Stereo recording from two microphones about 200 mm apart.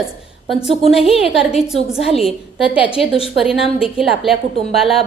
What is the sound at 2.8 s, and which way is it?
Speech, 25° left (ahead or behind).